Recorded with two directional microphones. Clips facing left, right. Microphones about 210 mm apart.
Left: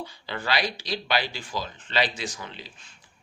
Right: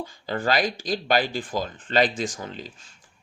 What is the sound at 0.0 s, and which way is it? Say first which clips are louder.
Speech: right 6 dB; 45° right (ahead or behind).